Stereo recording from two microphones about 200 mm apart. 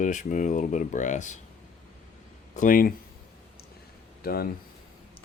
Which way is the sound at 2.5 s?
40° left (ahead or behind).